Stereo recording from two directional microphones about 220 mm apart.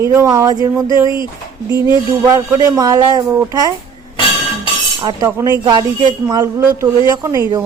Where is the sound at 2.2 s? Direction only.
10° right (ahead or behind).